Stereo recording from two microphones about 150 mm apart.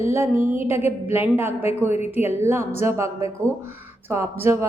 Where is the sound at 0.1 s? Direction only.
15° right (ahead or behind).